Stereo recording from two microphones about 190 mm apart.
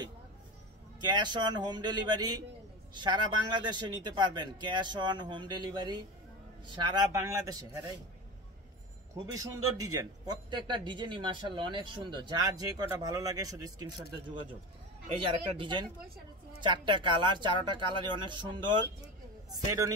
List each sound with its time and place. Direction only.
1.0 s speech: 25° right (ahead or behind)
9.1 s speech: 15° right (ahead or behind)
15.0 s speech: 30° right (ahead or behind)